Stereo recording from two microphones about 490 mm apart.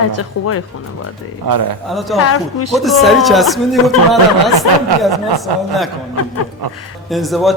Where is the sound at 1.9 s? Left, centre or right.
Centre.